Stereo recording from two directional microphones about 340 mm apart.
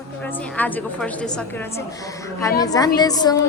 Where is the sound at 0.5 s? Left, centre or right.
Centre.